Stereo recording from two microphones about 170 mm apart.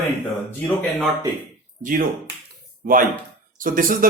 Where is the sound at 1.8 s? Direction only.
50° right (ahead or behind).